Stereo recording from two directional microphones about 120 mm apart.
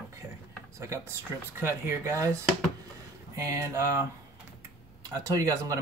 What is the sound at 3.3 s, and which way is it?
Speech, 30° right (ahead or behind).